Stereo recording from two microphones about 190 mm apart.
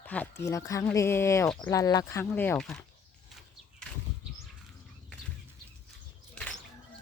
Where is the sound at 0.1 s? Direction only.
10° left (ahead or behind).